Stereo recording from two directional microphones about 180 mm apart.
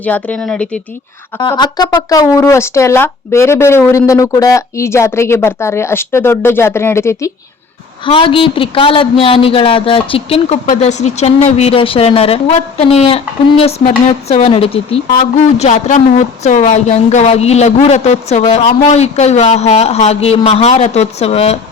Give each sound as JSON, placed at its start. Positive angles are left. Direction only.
{"t": 0.0, "sound": "speech", "side_deg": 10}
{"t": 1.5, "sound": "speech", "side_deg": 20}
{"t": 8.0, "sound": "a man's voice", "side_deg": 30}